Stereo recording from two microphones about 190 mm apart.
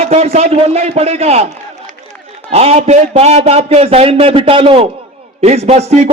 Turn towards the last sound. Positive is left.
turn(degrees=-35)  # may be behind; listen again after turning